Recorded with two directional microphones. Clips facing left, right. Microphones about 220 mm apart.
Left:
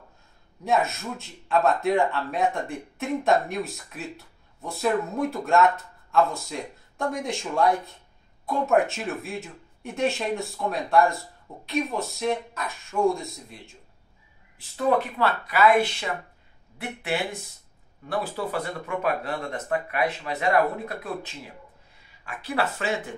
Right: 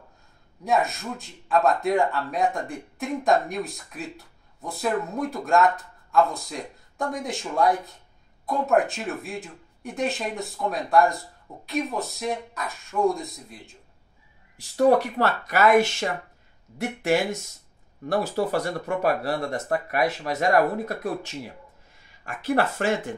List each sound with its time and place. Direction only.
0.7 s speech: centre (ahead or behind)
15.1 s speech: 45° right (ahead or behind)
22.2 s speech: 45° right (ahead or behind)